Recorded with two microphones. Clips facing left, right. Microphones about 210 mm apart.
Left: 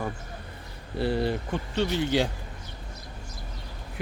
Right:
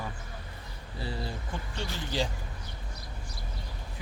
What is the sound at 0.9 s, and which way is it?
Speech, 65° left (ahead or behind).